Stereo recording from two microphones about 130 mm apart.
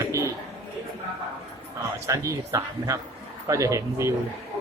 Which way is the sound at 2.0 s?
25° right (ahead or behind).